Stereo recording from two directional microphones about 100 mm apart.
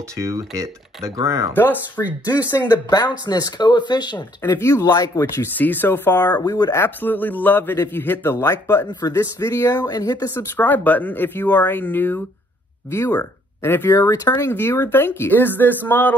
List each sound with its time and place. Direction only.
0.1 s speech: 30° right (ahead or behind)
1.5 s speech: 20° left (ahead or behind)
2.2 s speech: 30° left (ahead or behind)
2.6 s speech: 45° left (ahead or behind)
4.6 s speech: 30° left (ahead or behind)
4.8 s speech: 40° left (ahead or behind)
5.6 s speech: 20° left (ahead or behind)
6.3 s speech: 40° left (ahead or behind)
6.8 s speech: 20° left (ahead or behind)
9.8 s speech: 40° left (ahead or behind)
10.3 s speech: 20° left (ahead or behind)
13.9 s speech: 35° left (ahead or behind)
14.4 s speech: 25° left (ahead or behind)